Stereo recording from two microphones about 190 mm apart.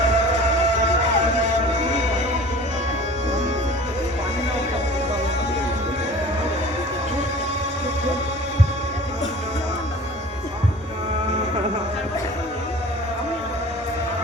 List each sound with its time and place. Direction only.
0.0 s music: 40° right (ahead or behind)